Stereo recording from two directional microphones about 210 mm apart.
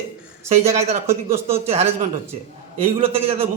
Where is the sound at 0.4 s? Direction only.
30° right (ahead or behind).